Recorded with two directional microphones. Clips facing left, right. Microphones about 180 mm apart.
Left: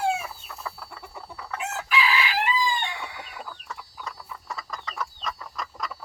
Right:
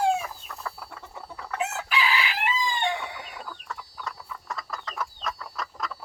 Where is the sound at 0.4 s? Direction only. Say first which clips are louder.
Even; 5° left (ahead or behind).